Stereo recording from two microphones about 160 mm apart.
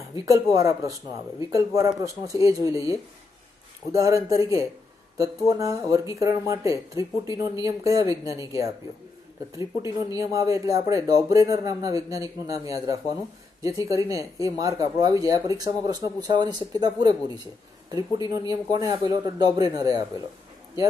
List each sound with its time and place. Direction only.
0.1 s speech: 20° right (ahead or behind)
10.1 s speech: 20° right (ahead or behind)
18.1 s speech: 25° right (ahead or behind)